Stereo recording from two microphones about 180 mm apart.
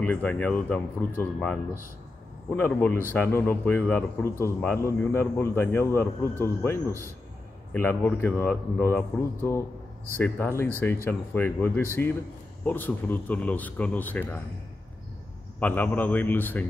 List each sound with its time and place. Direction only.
0.0 s a man's voice: 10° left (ahead or behind)
6.9 s a man's voice: 15° right (ahead or behind)
7.7 s a man's voice: 10° left (ahead or behind)
15.6 s a man's voice: 10° left (ahead or behind)